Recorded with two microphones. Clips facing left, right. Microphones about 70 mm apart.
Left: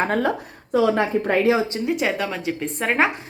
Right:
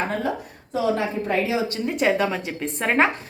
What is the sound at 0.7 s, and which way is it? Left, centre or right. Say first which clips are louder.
Speech: left 4 dB; left.